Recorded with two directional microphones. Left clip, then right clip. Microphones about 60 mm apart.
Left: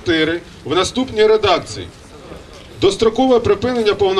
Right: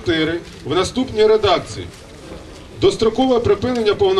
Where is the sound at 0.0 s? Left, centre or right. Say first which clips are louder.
Left 2 dB; centre.